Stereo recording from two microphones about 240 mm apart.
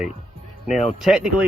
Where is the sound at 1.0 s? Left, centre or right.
Centre.